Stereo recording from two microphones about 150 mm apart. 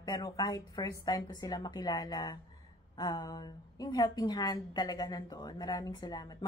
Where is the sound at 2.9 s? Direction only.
25° left (ahead or behind).